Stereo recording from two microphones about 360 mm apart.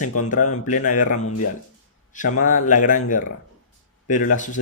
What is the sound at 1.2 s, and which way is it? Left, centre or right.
Speech, left.